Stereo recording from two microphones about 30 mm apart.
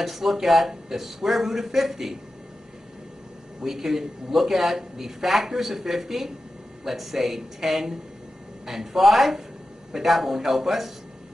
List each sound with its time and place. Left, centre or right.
0.0 s speech: centre
3.8 s speech: centre